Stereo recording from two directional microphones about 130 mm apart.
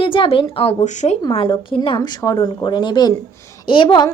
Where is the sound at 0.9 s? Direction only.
65° left (ahead or behind).